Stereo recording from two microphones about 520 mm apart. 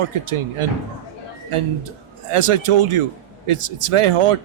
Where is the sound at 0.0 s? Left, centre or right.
Right.